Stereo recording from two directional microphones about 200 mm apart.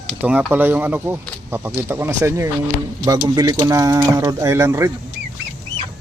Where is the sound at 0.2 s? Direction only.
10° right (ahead or behind).